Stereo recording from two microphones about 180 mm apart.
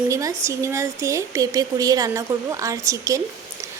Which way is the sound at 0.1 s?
15° right (ahead or behind).